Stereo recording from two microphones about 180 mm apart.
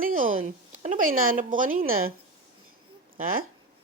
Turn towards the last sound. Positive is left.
turn(degrees=-50)  # may be behind; listen again after turning